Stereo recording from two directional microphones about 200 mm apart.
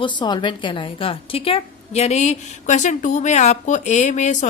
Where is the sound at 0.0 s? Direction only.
25° left (ahead or behind).